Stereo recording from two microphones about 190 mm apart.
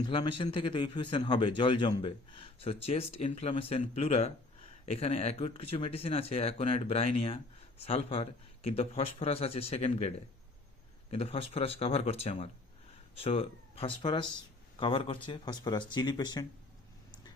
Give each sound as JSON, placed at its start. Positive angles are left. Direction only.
{"t": 0.1, "sound": "a man's voice", "side_deg": 25}